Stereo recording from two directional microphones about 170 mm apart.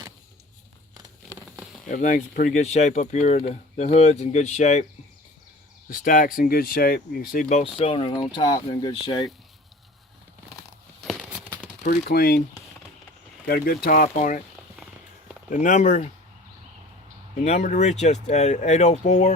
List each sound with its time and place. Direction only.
1.9 s speech: 45° left (ahead or behind)
5.9 s speech: 55° left (ahead or behind)
7.5 s speech: 35° left (ahead or behind)
11.0 s a sound: centre (ahead or behind)
11.9 s speech: 65° left (ahead or behind)
13.5 s speech: 60° left (ahead or behind)
15.4 s speech: 50° left (ahead or behind)
17.3 s speech: 40° left (ahead or behind)